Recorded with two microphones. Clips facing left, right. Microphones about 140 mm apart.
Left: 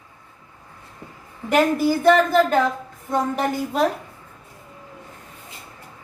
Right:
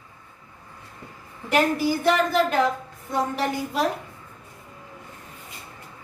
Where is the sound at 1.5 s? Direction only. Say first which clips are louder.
Left 3 dB; 45° left (ahead or behind).